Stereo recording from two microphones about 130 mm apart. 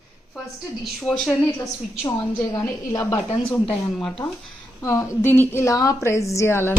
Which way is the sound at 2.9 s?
25° left (ahead or behind).